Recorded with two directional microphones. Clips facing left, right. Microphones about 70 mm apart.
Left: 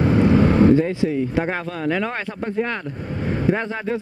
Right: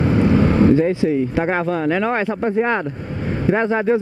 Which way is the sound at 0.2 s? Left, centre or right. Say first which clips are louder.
Even; right.